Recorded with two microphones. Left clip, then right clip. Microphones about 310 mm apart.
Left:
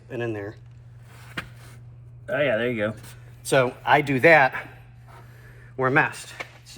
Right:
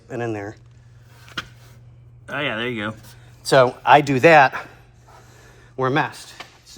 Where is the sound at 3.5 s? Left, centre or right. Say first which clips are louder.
Right 6 dB; right.